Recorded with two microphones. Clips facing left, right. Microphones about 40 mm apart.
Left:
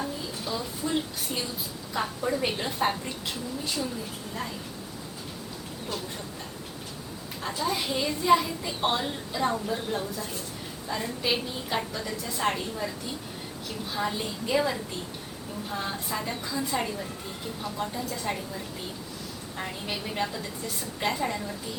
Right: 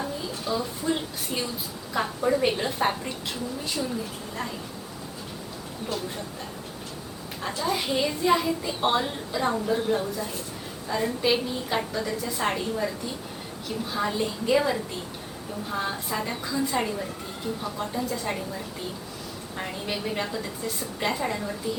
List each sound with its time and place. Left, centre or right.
0.0 s a sound: centre
1.9 s a woman's voice: centre
7.4 s a woman's voice: centre
13.9 s a woman's voice: centre